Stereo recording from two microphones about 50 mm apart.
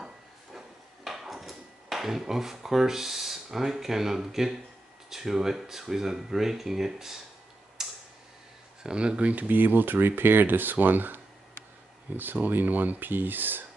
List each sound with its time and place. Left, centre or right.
0.0 s a sound: centre
5.1 s speech: centre
7.8 s tick: centre
8.8 s speech: centre
9.3 s speech: right